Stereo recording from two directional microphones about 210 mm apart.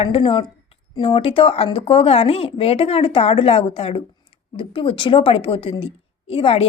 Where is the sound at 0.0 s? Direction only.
25° left (ahead or behind).